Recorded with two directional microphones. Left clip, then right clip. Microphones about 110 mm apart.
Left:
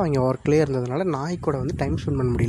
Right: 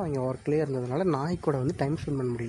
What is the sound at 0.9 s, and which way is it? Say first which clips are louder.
Speech: left 3 dB; 10° left (ahead or behind).